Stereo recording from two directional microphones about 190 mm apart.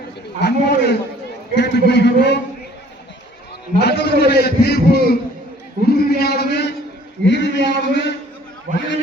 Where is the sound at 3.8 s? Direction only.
60° left (ahead or behind).